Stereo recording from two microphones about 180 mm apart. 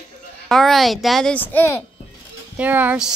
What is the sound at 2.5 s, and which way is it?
Speech, 10° right (ahead or behind).